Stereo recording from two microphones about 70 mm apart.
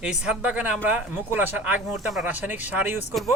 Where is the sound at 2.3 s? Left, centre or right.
Right.